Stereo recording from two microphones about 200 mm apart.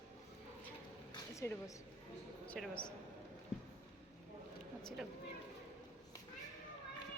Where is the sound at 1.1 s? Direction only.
15° left (ahead or behind).